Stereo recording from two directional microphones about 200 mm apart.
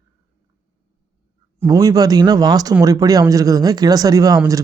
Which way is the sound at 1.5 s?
15° right (ahead or behind).